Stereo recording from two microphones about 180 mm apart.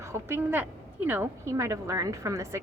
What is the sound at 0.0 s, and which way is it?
A woman's voice, 15° right (ahead or behind).